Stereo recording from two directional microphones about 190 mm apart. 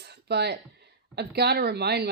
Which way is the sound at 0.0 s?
60° right (ahead or behind).